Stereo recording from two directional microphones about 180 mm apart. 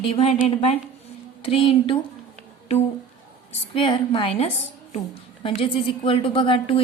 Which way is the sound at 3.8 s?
30° left (ahead or behind).